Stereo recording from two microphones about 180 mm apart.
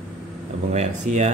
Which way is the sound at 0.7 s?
40° right (ahead or behind).